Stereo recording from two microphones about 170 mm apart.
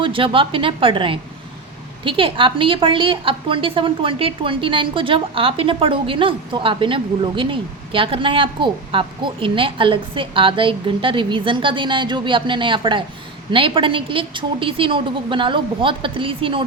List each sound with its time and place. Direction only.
0.0 s a woman's voice: 30° right (ahead or behind)